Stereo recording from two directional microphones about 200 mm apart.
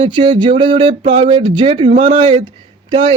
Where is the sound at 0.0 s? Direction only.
25° right (ahead or behind).